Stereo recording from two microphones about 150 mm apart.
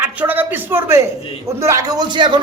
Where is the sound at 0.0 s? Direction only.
10° right (ahead or behind).